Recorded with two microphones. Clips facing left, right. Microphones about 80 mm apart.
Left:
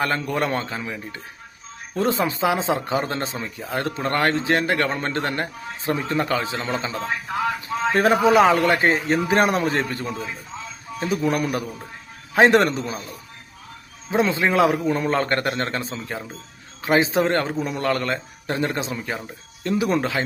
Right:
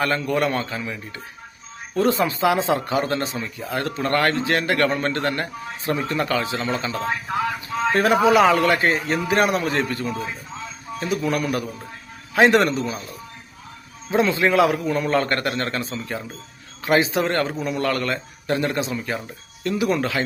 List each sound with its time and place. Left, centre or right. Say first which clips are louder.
0.0 s a man's voice: right 2 dB; left
4.0 s a man's voice: right 1 dB; left
7.9 s a man's voice: even; left
14.1 s a man's voice: right 1 dB; left
17.0 s a man's voice: left 1 dB; left